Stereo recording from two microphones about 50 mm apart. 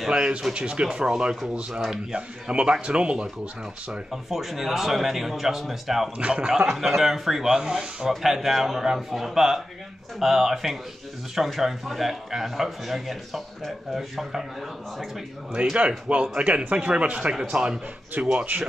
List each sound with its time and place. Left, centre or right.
0.0 s speech: centre
1.7 s a man's voice: centre
2.1 s speech: right
4.1 s a man's voice: centre
6.1 s speech: right
6.7 s a man's voice: centre
15.6 s speech: right